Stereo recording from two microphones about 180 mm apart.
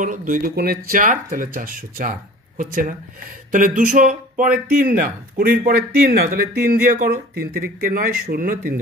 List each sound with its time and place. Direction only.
0.0 s speech: 45° right (ahead or behind)